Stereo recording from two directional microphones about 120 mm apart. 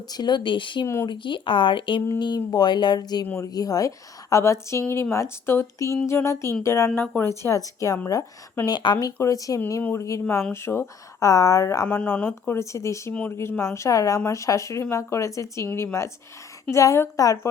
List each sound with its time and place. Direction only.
0.1 s speech: 35° left (ahead or behind)
7.0 s speech: 10° left (ahead or behind)
7.3 s speech: 25° left (ahead or behind)